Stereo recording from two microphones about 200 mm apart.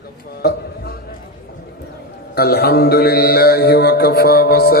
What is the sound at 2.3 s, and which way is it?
Mantra, 50° left (ahead or behind).